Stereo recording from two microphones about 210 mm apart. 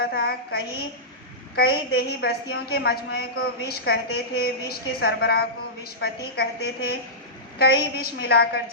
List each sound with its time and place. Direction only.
0.0 s a woman's voice: 50° left (ahead or behind)